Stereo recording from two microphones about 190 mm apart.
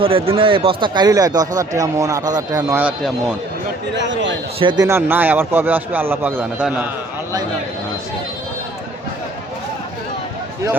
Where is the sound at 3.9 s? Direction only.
70° right (ahead or behind).